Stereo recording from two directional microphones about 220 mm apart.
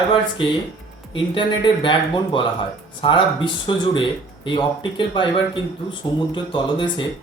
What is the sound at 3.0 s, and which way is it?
Speech, 20° left (ahead or behind).